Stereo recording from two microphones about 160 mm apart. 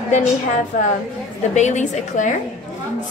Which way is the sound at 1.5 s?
50° left (ahead or behind).